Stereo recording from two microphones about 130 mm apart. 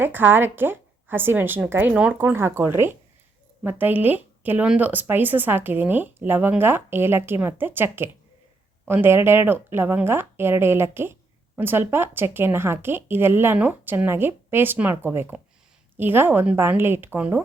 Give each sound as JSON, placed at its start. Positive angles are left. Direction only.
{"t": 0.0, "sound": "speech", "side_deg": -15}